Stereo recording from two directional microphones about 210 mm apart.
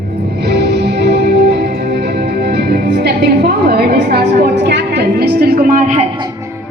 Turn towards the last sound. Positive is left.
turn(degrees=-35)  # may be behind; listen again after turning